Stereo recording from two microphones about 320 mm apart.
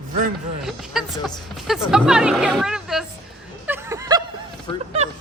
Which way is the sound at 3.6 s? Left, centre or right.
Centre.